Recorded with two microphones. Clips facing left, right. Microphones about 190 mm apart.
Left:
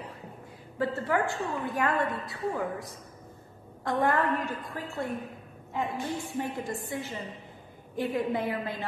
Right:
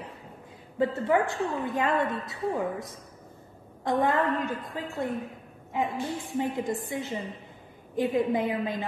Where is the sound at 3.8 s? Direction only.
20° right (ahead or behind).